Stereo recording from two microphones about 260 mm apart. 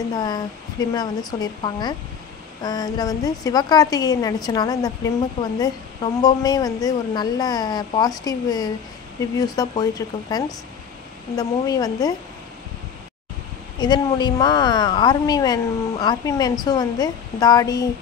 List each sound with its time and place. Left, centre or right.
0.2 s a woman's voice: centre
6.2 s a woman's voice: centre
13.7 s a woman's voice: centre